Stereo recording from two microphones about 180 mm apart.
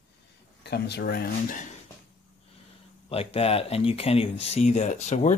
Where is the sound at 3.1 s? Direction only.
35° left (ahead or behind).